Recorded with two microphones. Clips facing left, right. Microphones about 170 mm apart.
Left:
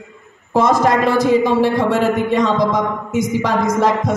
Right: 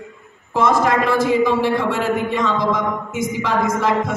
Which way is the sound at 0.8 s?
40° left (ahead or behind).